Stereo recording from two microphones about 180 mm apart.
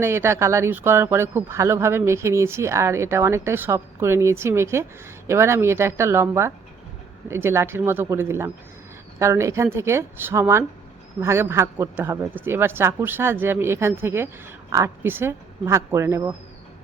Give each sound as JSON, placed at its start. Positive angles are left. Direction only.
{"t": 0.0, "sound": "speech", "side_deg": -15}